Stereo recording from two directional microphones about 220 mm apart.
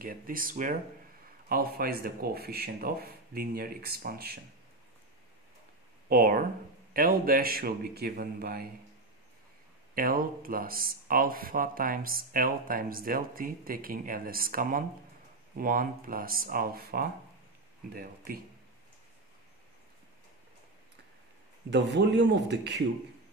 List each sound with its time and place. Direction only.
0.0 s a man's voice: 40° right (ahead or behind)
6.0 s a man's voice: 40° right (ahead or behind)
9.9 s speech: 40° right (ahead or behind)
21.6 s a man's voice: 50° right (ahead or behind)